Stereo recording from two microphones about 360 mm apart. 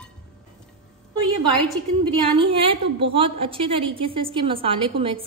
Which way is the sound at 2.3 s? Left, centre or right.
Centre.